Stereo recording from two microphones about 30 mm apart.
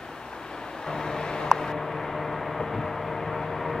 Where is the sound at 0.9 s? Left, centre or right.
Left.